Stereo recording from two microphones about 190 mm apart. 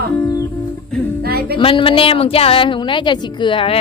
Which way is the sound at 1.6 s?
30° left (ahead or behind).